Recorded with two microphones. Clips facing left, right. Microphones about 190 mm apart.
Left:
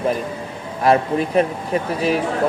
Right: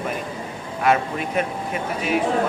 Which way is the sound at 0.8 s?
35° left (ahead or behind).